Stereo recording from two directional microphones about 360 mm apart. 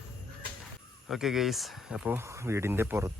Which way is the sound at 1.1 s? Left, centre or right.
Centre.